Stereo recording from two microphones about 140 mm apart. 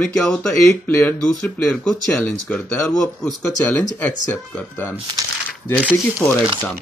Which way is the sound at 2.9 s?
5° left (ahead or behind).